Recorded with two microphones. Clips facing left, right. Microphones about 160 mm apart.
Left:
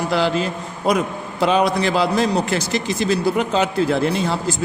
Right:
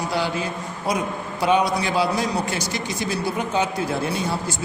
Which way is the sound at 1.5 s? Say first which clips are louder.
Left 2 dB; 80° left.